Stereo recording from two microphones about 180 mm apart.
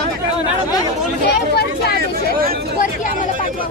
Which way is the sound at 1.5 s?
60° left (ahead or behind).